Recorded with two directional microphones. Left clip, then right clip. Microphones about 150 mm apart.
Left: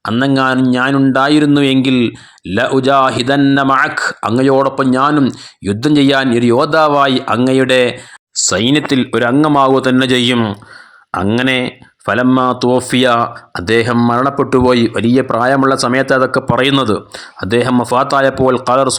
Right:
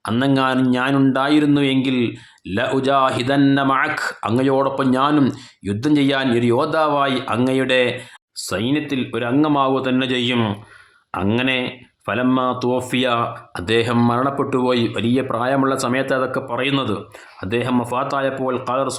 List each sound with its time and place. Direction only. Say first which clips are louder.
0.0 s speech: left 5 dB; 35° left (ahead or behind)
8.5 s speech: left 8 dB; 55° left (ahead or behind)